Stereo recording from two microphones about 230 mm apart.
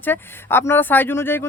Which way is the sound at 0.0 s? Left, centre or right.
Centre.